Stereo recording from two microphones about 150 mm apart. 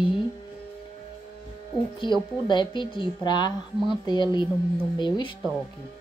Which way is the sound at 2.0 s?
30° left (ahead or behind).